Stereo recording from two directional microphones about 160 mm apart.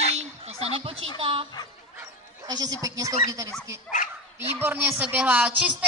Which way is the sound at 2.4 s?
25° right (ahead or behind).